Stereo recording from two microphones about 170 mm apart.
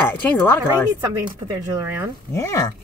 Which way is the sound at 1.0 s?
20° right (ahead or behind).